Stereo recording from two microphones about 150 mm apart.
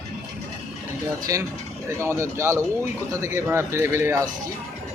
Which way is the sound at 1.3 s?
20° right (ahead or behind).